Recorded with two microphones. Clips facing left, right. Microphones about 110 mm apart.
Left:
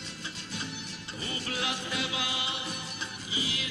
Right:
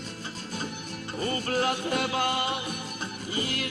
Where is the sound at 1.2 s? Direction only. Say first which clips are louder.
Right 9 dB; 50° right (ahead or behind).